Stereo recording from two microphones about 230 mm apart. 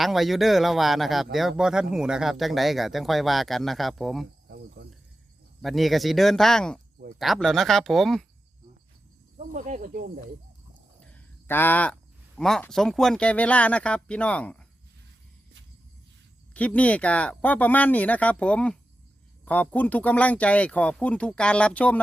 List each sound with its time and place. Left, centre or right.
0.0 s speech: centre
4.4 s cricket: right
5.6 s speech: centre
9.5 s speech: right
11.0 s a sound: centre
12.4 s speech: centre
16.6 s speech: centre